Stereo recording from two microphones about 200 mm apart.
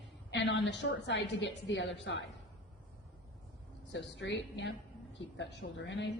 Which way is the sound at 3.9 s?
60° left (ahead or behind).